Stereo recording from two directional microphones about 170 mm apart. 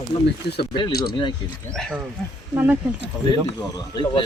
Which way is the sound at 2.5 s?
10° right (ahead or behind).